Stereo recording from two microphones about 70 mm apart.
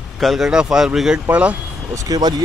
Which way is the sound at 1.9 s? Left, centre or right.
Right.